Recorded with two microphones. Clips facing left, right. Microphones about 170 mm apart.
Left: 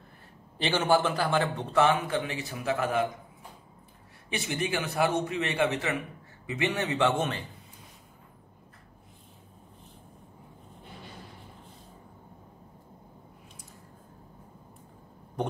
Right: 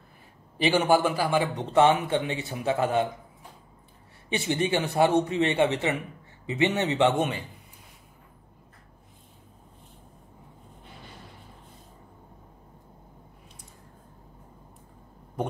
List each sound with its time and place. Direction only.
0.6 s a man's voice: 15° right (ahead or behind)
1.7 s a man's voice: 25° right (ahead or behind)
4.3 s a man's voice: 30° right (ahead or behind)